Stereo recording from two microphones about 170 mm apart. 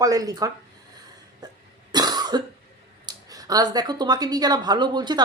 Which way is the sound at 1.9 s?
25° right (ahead or behind).